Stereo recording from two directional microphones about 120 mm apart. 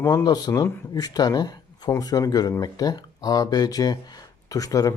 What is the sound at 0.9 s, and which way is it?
Speech, 35° left (ahead or behind).